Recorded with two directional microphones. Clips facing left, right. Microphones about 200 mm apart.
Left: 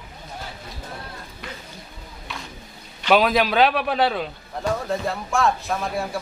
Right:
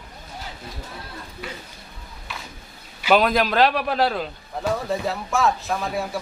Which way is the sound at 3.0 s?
Centre (ahead or behind).